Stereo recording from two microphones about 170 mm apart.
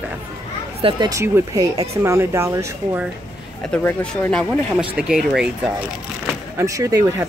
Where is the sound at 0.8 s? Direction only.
30° right (ahead or behind).